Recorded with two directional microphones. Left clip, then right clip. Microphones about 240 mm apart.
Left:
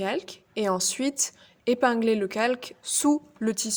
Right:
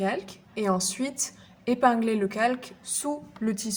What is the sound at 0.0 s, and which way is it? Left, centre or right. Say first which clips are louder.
A woman's voice: even; left.